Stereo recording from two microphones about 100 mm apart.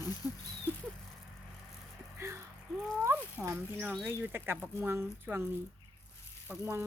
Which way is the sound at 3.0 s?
20° right (ahead or behind).